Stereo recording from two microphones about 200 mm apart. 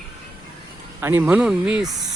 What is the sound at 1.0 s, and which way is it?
Speech, 10° right (ahead or behind).